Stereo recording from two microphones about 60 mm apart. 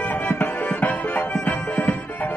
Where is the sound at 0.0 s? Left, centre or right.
Left.